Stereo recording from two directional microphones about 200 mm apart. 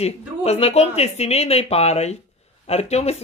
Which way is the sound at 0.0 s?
30° left (ahead or behind).